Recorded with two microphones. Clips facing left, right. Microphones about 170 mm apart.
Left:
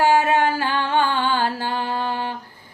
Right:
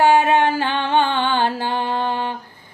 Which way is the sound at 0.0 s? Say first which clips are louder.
Right 2 dB; 25° right (ahead or behind).